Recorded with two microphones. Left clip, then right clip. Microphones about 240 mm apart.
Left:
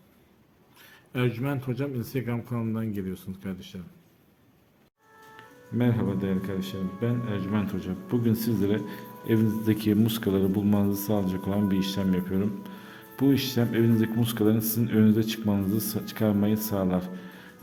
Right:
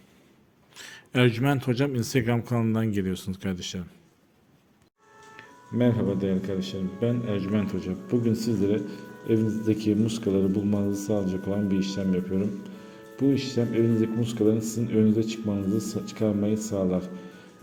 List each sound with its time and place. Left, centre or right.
0.8 s speech: right
5.7 s a man's voice: centre